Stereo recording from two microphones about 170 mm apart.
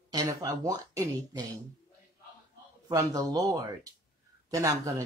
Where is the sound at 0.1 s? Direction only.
20° right (ahead or behind).